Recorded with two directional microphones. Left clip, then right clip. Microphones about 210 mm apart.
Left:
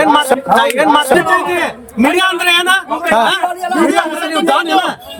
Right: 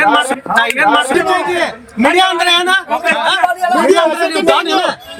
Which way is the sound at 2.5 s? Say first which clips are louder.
Even; 30° left (ahead or behind).